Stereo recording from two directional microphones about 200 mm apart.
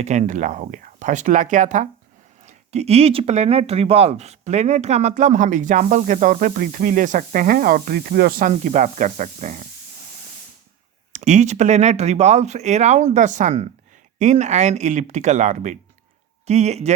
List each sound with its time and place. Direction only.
0.0 s speech: 35° right (ahead or behind)
11.1 s speech: 35° right (ahead or behind)